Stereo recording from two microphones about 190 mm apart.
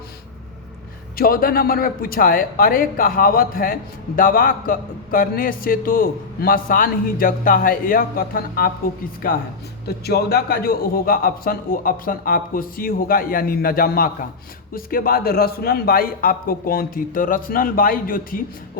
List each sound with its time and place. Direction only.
1.1 s speech: 50° left (ahead or behind)
9.8 s speech: 55° left (ahead or behind)